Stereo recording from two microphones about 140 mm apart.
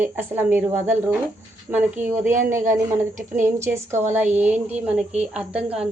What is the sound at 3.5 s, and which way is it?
A woman's voice, 20° right (ahead or behind).